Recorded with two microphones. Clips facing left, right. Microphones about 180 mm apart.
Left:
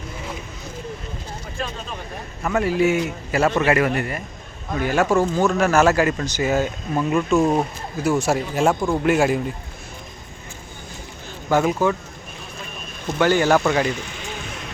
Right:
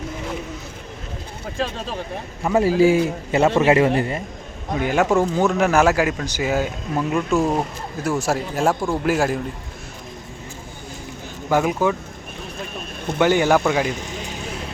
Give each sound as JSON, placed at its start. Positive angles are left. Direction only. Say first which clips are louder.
{"t": 2.6, "sound": "a man's voice", "louder": "right 4 dB", "side_deg": -30}
{"t": 11.4, "sound": "speech", "louder": "even", "side_deg": -10}
{"t": 13.1, "sound": "speech", "louder": "even", "side_deg": -15}